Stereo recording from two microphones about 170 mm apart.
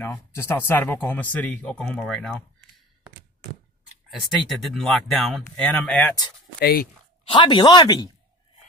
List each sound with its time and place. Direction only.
0.0 s speech: 15° left (ahead or behind)
4.5 s speech: centre (ahead or behind)
6.6 s speech: 60° left (ahead or behind)
7.2 s speech: 30° left (ahead or behind)